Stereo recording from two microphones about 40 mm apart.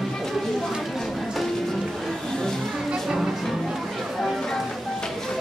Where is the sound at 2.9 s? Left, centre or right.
Centre.